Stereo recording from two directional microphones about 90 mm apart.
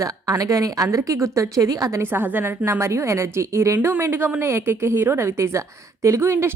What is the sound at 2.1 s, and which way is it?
A woman's voice, 25° right (ahead or behind).